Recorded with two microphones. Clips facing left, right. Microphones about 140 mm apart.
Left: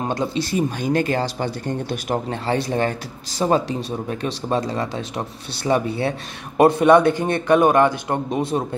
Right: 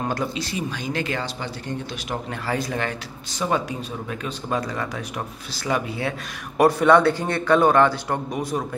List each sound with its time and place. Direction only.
0.4 s speech: 45° left (ahead or behind)
2.2 s a man's voice: 30° left (ahead or behind)